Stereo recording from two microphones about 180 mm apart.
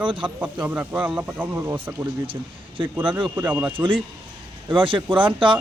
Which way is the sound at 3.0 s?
25° right (ahead or behind).